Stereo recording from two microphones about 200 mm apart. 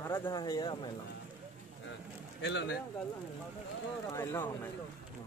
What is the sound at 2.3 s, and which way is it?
Speech, 60° left (ahead or behind).